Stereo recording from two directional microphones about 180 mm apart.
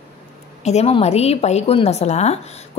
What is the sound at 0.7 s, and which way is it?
A woman's voice, 35° left (ahead or behind).